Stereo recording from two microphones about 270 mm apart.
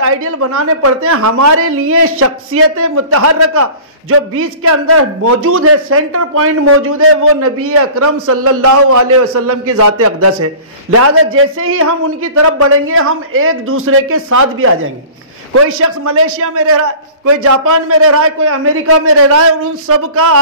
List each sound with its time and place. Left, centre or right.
0.5 s a man's voice: right